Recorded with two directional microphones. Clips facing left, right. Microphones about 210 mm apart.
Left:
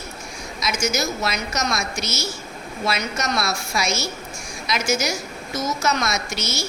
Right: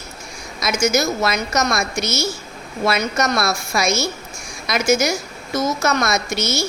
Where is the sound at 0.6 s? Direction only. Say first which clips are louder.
Right 5 dB; 55° right (ahead or behind).